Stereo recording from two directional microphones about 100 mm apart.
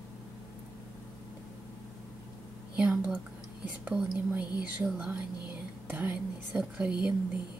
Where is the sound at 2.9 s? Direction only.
20° right (ahead or behind).